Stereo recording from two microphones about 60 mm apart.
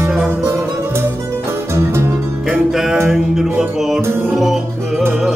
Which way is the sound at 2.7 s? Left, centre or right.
Centre.